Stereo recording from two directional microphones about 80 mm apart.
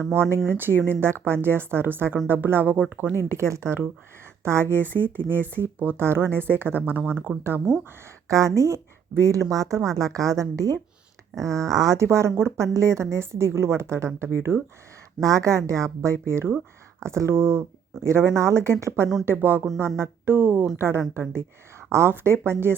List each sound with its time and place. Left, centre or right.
0.1 s a woman's voice: right
8.3 s speech: right
12.0 s a woman's voice: right
15.2 s a woman's voice: right